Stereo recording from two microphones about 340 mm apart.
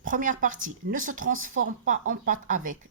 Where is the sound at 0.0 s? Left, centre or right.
Right.